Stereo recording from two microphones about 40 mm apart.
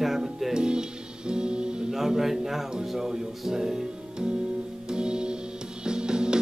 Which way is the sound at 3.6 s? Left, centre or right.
Centre.